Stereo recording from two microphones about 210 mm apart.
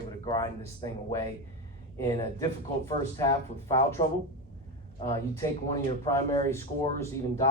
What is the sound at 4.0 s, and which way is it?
Speech, 25° left (ahead or behind).